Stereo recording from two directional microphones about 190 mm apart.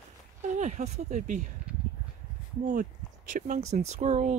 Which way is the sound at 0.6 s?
40° right (ahead or behind).